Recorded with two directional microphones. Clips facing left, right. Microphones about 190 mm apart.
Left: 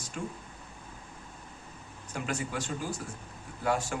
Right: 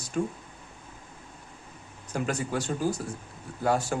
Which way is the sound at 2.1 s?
40° right (ahead or behind).